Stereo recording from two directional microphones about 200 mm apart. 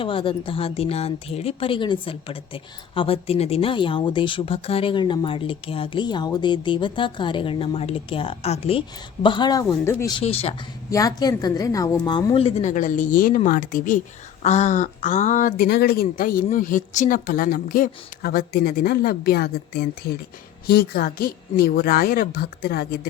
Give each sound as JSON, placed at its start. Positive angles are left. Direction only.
{"t": 0.0, "sound": "speech", "side_deg": 25}
{"t": 10.1, "sound": "speech", "side_deg": 30}
{"t": 10.9, "sound": "speech", "side_deg": 20}